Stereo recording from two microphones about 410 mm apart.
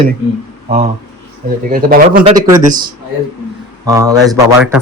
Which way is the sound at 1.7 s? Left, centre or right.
Right.